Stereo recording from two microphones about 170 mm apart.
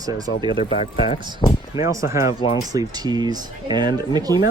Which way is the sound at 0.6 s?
35° left (ahead or behind).